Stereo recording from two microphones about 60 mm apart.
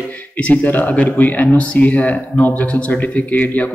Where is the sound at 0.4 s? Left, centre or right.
Left.